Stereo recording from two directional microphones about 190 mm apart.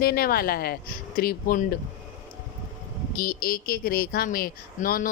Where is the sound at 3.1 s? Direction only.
50° left (ahead or behind).